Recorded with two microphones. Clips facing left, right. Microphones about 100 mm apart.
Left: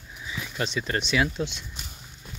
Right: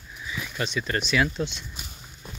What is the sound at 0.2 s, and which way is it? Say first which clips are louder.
Speech: even; 25° left (ahead or behind).